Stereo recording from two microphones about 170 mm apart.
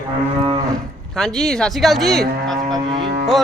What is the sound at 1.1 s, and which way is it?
A man's voice, 5° left (ahead or behind).